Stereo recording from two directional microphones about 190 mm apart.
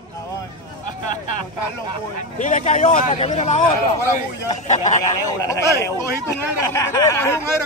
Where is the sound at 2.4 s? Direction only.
40° left (ahead or behind).